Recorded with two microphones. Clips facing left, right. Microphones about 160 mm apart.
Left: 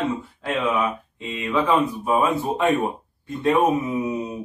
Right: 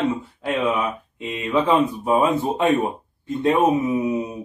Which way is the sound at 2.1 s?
20° right (ahead or behind).